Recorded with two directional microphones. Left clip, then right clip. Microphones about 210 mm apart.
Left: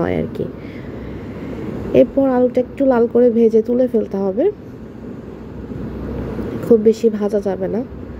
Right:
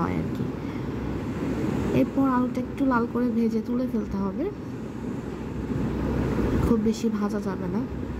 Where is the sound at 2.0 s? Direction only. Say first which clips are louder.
Left 13 dB; 15° left (ahead or behind).